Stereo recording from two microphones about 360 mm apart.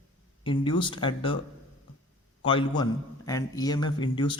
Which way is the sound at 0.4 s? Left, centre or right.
Centre.